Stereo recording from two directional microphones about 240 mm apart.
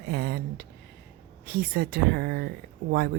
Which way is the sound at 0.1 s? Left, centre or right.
Right.